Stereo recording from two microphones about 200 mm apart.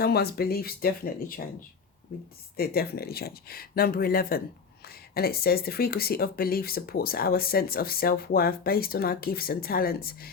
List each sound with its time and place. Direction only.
0.0 s speech: 50° left (ahead or behind)